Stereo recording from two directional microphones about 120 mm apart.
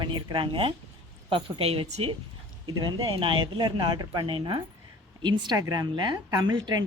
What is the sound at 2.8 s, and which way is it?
A woman's voice, 40° right (ahead or behind).